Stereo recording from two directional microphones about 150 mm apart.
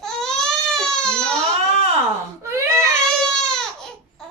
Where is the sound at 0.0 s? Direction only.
5° left (ahead or behind).